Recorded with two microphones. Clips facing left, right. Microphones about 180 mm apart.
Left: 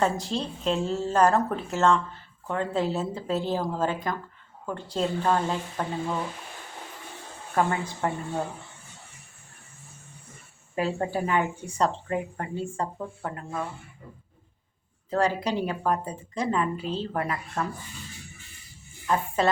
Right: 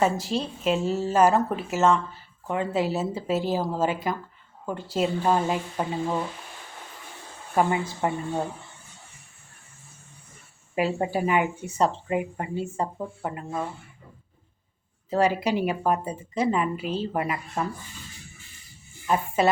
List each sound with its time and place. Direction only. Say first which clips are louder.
0.0 s speech: right 2 dB; 5° right (ahead or behind)
7.5 s speech: right 2 dB; 15° right (ahead or behind)
10.8 s speech: right 2 dB; 15° right (ahead or behind)
15.1 s speech: right 2 dB; 10° right (ahead or behind)
19.0 s speech: right 2 dB; 10° right (ahead or behind)